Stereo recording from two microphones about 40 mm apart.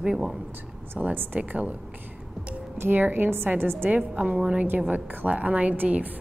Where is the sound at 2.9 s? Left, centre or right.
Right.